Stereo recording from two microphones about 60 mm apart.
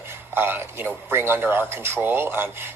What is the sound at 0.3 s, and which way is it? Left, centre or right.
A man's voice, right.